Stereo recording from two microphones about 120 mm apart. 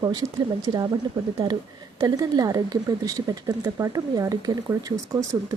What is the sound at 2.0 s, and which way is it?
Speech, 30° right (ahead or behind).